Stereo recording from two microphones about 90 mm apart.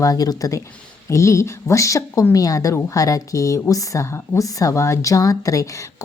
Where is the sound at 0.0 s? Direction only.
45° left (ahead or behind).